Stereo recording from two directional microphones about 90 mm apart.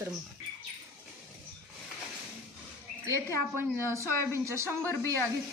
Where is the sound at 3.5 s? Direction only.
30° right (ahead or behind).